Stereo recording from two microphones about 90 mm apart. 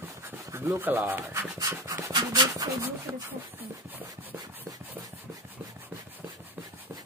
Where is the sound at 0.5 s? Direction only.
30° right (ahead or behind).